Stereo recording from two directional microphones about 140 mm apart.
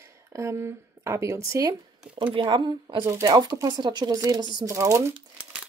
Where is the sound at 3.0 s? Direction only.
20° right (ahead or behind).